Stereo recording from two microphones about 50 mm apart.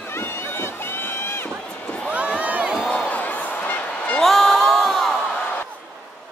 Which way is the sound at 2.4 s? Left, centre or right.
Right.